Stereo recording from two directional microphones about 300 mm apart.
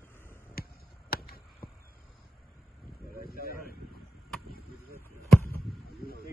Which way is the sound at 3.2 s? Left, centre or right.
Left.